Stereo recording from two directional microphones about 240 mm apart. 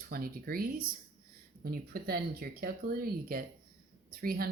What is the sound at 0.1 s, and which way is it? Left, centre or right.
Speech, right.